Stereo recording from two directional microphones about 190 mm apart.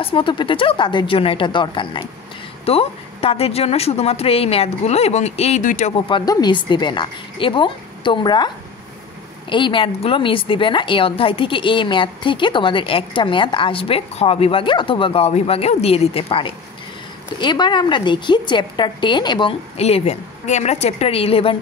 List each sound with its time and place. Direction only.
0.0 s a woman's voice: 25° left (ahead or behind)
5.9 s a woman's voice: 25° left (ahead or behind)
9.5 s a woman's voice: 25° left (ahead or behind)